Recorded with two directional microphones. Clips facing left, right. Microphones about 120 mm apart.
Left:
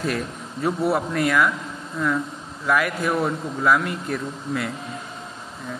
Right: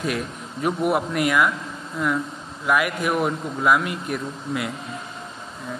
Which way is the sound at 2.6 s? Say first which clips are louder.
Even; 15° right (ahead or behind).